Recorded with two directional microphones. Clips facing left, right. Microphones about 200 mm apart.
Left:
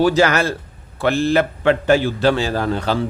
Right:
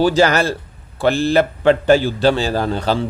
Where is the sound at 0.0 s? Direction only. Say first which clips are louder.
Right 1 dB; 30° right (ahead or behind).